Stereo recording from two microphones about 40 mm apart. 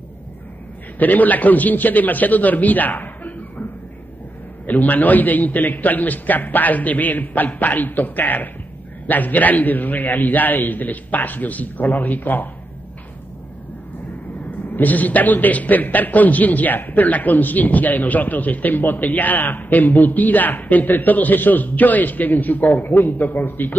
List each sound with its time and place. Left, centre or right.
0.9 s a man's voice: left
4.6 s a man's voice: left
14.7 s a man's voice: left